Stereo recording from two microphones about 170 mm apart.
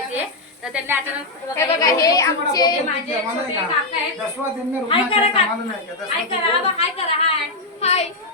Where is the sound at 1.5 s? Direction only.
20° left (ahead or behind).